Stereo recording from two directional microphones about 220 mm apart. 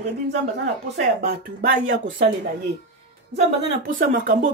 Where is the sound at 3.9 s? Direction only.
40° right (ahead or behind).